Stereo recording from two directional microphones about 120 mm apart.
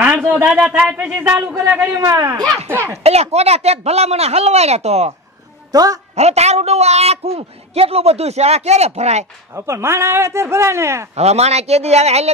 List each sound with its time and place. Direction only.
0.0 s a man's voice: 10° right (ahead or behind)
1.9 s speech: 30° right (ahead or behind)
3.0 s a man's voice: 60° right (ahead or behind)
5.7 s a woman's voice: 30° right (ahead or behind)
6.1 s a man's voice: 65° right (ahead or behind)
9.5 s speech: 20° right (ahead or behind)
11.1 s a man's voice: 65° right (ahead or behind)